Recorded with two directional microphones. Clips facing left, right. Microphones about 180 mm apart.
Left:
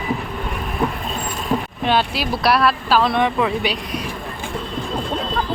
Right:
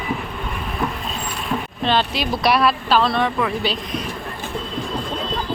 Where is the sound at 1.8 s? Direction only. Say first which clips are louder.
Right 2 dB; 10° left (ahead or behind).